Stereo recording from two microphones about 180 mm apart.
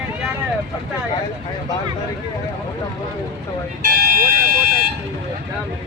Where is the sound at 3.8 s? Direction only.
50° right (ahead or behind).